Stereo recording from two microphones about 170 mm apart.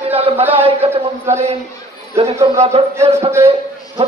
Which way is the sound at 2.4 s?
35° right (ahead or behind).